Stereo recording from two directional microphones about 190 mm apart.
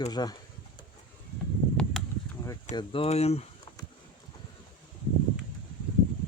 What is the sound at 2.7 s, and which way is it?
Speech, 30° left (ahead or behind).